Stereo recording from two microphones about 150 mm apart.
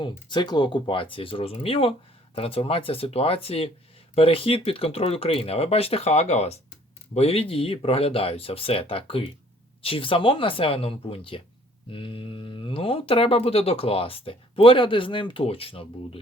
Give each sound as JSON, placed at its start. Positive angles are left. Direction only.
{"t": 0.0, "sound": "speech", "side_deg": 30}